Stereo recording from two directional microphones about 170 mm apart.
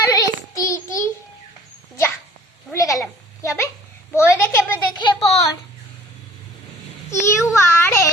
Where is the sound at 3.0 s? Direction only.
15° left (ahead or behind).